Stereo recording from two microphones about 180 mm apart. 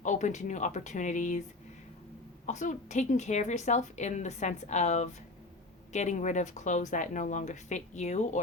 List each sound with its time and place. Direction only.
0.0 s speech: 45° left (ahead or behind)
2.5 s a woman's voice: 40° left (ahead or behind)